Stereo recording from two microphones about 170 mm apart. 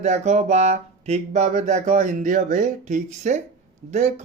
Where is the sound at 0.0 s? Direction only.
40° right (ahead or behind).